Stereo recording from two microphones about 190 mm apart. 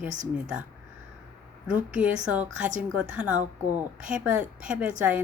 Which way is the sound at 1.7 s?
10° right (ahead or behind).